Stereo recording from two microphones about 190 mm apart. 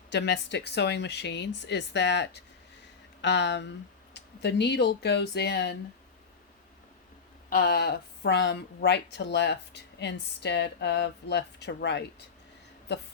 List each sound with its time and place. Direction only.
0.1 s a woman's voice: 65° left (ahead or behind)
7.5 s a woman's voice: 55° left (ahead or behind)